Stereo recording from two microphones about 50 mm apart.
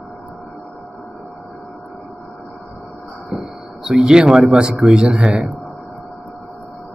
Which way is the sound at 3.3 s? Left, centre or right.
Centre.